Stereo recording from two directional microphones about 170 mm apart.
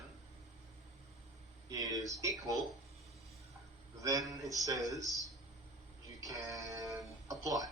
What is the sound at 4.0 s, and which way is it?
Speech, 20° right (ahead or behind).